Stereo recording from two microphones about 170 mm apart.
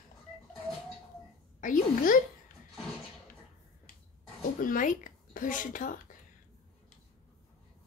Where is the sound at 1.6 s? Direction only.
50° left (ahead or behind).